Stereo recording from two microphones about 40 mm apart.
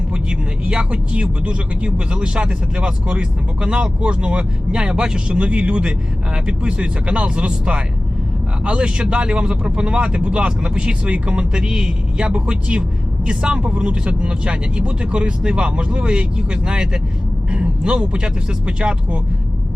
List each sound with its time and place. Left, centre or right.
0.1 s speech: right